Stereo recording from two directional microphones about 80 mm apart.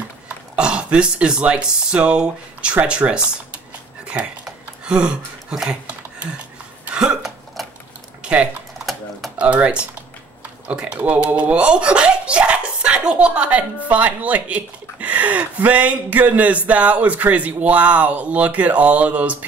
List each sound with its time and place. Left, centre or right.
0.6 s speech: centre
4.0 s a sound: centre
6.9 s a sound: centre
7.6 s sewing machine: centre
8.2 s typing: centre
8.7 s typing: centre
9.4 s speech: centre